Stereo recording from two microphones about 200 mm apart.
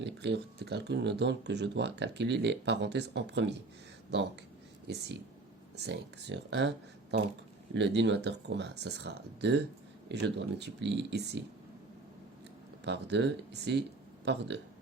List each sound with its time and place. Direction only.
0.0 s speech: 60° right (ahead or behind)
5.7 s speech: 60° right (ahead or behind)
7.7 s speech: 60° right (ahead or behind)
12.8 s speech: 60° right (ahead or behind)